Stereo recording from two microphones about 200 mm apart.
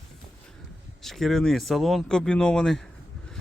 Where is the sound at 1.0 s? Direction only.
Centre (ahead or behind).